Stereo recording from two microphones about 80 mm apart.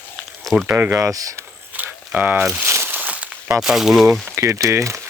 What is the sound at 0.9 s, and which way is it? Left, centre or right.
Speech, right.